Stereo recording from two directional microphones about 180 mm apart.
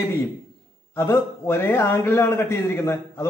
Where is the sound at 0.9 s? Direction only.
15° left (ahead or behind).